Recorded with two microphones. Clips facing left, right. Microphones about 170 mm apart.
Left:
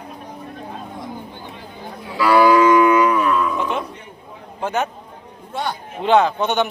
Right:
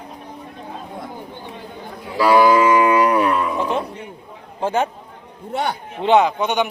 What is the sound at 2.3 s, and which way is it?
Livestock, 25° right (ahead or behind).